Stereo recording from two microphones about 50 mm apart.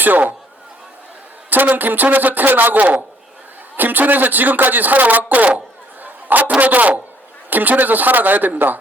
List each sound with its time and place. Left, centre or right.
0.0 s speech: right
1.5 s speech: right
6.0 s chatter: right
6.6 s speech: right